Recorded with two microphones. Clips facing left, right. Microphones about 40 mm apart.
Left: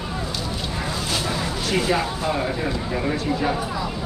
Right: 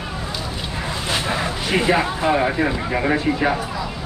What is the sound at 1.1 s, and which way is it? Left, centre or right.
Speech, right.